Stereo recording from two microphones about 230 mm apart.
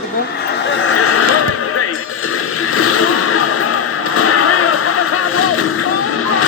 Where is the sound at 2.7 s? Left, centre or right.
Left.